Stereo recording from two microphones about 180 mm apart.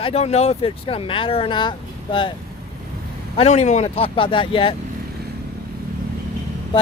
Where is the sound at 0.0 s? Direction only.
35° left (ahead or behind).